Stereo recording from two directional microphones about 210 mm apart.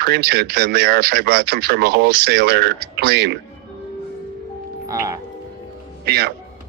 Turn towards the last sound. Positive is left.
turn(degrees=-50)  # may be behind; listen again after turning